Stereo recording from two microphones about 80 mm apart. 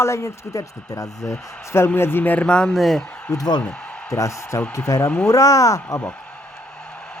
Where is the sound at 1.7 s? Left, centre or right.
Left.